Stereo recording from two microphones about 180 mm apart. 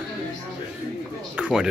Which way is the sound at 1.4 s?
5° right (ahead or behind).